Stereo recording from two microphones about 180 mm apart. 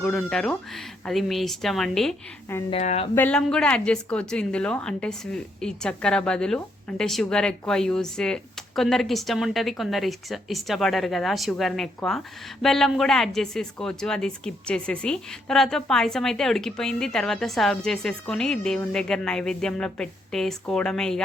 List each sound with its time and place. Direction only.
0.0 s a woman's voice: 5° left (ahead or behind)
2.6 s speech: 35° left (ahead or behind)
3.2 s a woman's voice: 5° left (ahead or behind)